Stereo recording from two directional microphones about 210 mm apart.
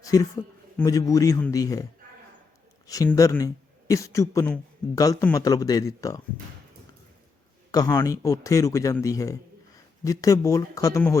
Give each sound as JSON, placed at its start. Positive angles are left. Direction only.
{"t": 0.0, "sound": "a man's voice", "side_deg": 15}
{"t": 7.7, "sound": "a man's voice", "side_deg": 15}